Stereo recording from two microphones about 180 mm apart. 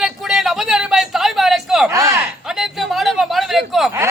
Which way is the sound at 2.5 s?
Centre (ahead or behind).